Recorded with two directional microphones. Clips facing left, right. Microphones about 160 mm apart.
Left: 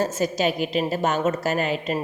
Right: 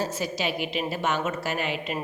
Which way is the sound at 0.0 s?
45° left (ahead or behind).